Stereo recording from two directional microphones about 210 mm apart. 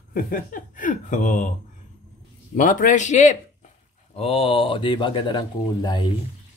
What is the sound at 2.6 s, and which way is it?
Speech, 35° left (ahead or behind).